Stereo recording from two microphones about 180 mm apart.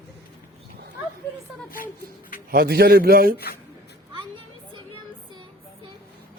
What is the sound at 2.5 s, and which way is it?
Speech, 60° right (ahead or behind).